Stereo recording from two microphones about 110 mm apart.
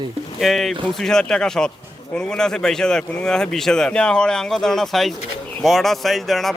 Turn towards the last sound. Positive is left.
turn(degrees=0)  # may be behind; listen again after turning